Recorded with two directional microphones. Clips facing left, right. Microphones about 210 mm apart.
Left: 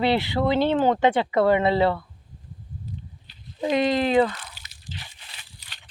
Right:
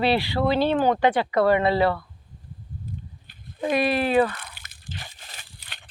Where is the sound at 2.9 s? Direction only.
50° right (ahead or behind).